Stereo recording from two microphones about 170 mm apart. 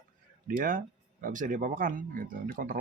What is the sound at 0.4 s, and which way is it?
Speech, 55° right (ahead or behind).